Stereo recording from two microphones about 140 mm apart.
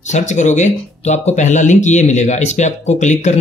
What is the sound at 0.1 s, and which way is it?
Speech, 60° left (ahead or behind).